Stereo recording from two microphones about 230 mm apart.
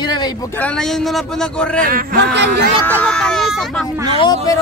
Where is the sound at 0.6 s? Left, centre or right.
Centre.